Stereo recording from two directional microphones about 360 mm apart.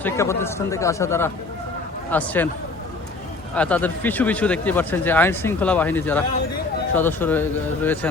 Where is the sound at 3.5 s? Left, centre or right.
Centre.